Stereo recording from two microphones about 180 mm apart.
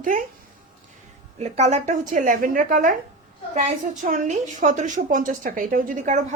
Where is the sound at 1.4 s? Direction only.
40° right (ahead or behind).